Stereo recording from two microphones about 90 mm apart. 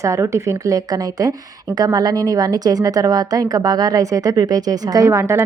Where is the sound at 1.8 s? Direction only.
45° right (ahead or behind).